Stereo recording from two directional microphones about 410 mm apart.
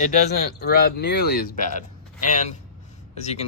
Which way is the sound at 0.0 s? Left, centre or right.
Left.